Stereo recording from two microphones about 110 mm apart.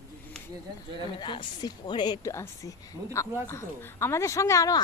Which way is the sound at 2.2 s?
25° left (ahead or behind).